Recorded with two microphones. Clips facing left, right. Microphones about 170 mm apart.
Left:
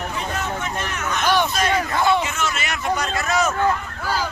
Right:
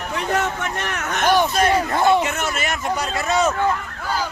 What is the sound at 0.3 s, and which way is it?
Vehicle, 65° right (ahead or behind).